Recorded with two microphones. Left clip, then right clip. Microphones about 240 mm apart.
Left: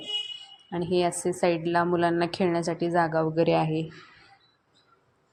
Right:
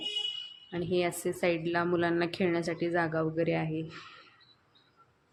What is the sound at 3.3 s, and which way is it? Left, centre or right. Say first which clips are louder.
Speech: left 7 dB; left.